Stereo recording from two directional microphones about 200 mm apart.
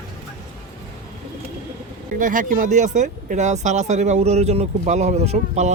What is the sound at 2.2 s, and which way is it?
Speech, 40° right (ahead or behind).